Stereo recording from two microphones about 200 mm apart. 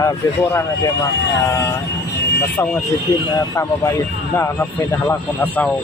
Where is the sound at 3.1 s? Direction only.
15° left (ahead or behind).